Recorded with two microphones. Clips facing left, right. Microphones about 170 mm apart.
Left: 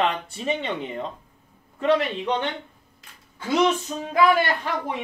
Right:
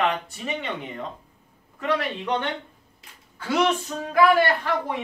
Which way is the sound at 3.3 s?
20° left (ahead or behind).